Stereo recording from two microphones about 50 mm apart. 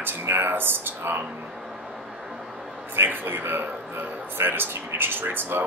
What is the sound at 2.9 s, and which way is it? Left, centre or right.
Speech, right.